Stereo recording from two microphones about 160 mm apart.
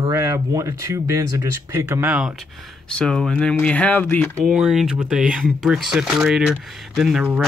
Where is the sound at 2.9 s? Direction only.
5° left (ahead or behind).